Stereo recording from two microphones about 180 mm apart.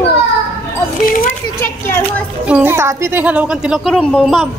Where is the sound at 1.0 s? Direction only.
50° left (ahead or behind).